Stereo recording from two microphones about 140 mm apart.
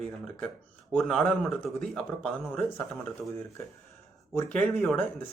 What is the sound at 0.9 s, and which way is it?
A man's voice, 5° left (ahead or behind).